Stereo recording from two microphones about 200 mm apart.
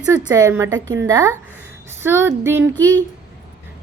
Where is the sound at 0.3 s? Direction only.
15° right (ahead or behind).